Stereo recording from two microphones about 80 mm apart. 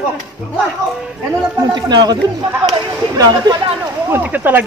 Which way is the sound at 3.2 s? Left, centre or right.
Right.